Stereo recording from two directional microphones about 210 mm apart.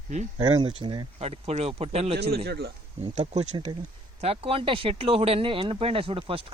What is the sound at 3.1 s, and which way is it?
Speech, 30° right (ahead or behind).